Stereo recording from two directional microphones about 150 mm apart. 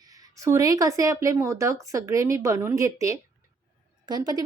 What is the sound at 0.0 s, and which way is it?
Speech, 25° right (ahead or behind).